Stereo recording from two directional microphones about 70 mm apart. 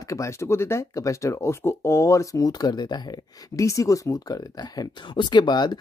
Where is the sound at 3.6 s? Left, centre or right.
Left.